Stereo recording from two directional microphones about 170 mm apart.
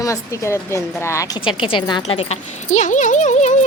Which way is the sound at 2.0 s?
40° left (ahead or behind).